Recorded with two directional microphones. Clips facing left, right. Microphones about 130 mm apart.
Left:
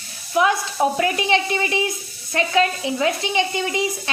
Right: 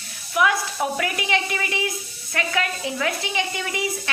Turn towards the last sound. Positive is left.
turn(degrees=25)  # may be behind; listen again after turning